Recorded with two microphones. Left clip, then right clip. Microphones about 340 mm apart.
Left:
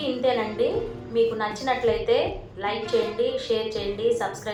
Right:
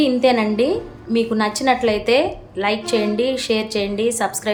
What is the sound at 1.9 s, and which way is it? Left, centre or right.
A woman's voice, right.